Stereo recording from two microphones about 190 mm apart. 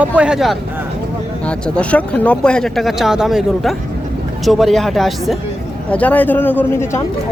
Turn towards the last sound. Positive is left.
turn(degrees=15)  # may be behind; listen again after turning